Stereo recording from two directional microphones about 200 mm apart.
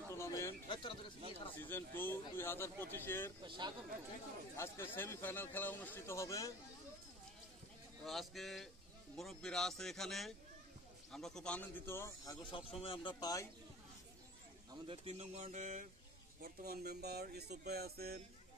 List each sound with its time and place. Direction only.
0.1 s a sound: 15° left (ahead or behind)
0.7 s speech: 25° left (ahead or behind)
1.6 s a man's voice: 10° left (ahead or behind)
3.4 s speech: 25° right (ahead or behind)
4.6 s a man's voice: 10° left (ahead or behind)
8.0 s a man's voice: centre (ahead or behind)
12.4 s speech: 25° left (ahead or behind)
14.9 s speech: 30° right (ahead or behind); by 18.2 s 50° right (ahead or behind)